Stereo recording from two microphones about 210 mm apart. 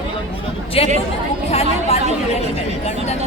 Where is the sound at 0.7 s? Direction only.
25° left (ahead or behind).